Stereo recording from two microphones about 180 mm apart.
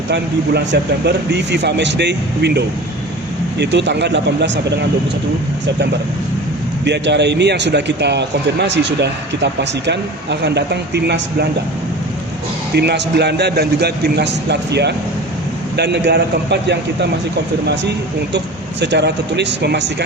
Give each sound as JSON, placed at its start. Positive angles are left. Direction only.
{"t": 0.1, "sound": "a man's voice", "side_deg": -70}
{"t": 6.8, "sound": "a man's voice", "side_deg": -70}
{"t": 12.7, "sound": "a man's voice", "side_deg": -70}
{"t": 18.3, "sound": "a man's voice", "side_deg": -70}